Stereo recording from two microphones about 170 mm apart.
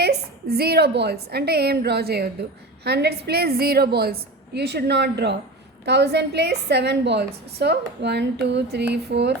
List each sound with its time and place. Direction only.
0.0 s a woman's voice: 70° right (ahead or behind)